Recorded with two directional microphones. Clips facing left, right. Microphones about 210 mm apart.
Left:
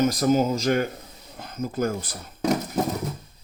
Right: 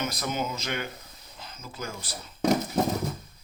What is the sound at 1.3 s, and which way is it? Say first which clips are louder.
Speech: left 13 dB; 55° left (ahead or behind).